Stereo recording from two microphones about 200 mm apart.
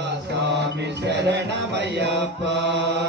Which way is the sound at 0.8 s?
60° right (ahead or behind).